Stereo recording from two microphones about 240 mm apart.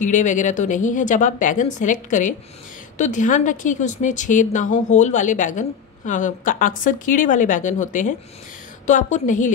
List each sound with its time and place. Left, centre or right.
0.0 s a woman's voice: left